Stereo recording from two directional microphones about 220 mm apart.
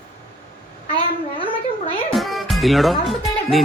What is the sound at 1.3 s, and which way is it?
Speech, 25° left (ahead or behind).